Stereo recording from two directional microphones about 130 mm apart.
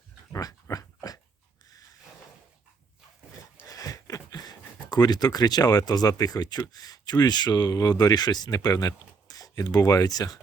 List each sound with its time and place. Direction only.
0.3 s dog: 30° left (ahead or behind)
3.8 s speech: 25° left (ahead or behind)